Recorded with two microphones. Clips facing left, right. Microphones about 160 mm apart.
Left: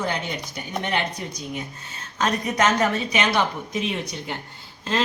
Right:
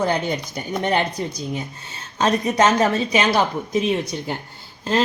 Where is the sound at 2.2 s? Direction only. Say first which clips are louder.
Right 4 dB; 30° right (ahead or behind).